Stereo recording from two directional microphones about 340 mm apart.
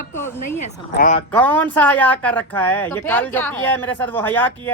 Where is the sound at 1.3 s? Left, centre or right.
Centre.